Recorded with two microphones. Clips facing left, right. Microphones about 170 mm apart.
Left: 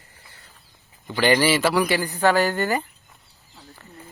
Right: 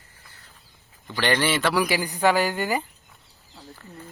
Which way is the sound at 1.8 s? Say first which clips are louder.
Left 1 dB; 10° right (ahead or behind).